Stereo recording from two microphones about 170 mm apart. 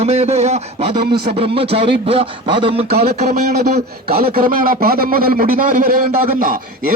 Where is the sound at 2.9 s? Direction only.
65° right (ahead or behind).